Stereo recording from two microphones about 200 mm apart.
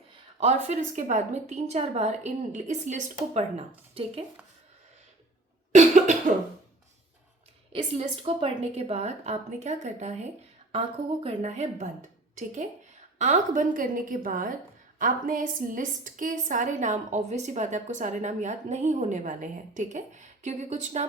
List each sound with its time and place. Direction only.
0.3 s a woman's voice: 35° right (ahead or behind)
5.7 s cough: 40° right (ahead or behind)
7.8 s a woman's voice: 25° right (ahead or behind)